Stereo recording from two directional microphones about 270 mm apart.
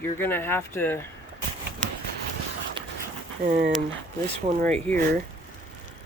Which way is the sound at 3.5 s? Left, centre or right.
Right.